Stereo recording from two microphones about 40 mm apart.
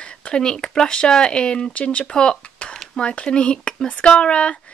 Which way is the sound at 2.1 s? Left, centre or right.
Left.